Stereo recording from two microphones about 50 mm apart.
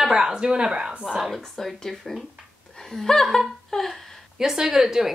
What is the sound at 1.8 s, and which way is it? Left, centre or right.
Speech, centre.